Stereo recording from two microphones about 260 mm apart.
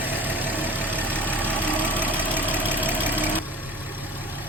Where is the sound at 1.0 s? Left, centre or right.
Centre.